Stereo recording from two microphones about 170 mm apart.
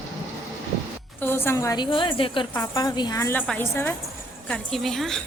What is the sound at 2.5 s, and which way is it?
A woman's voice, 15° left (ahead or behind).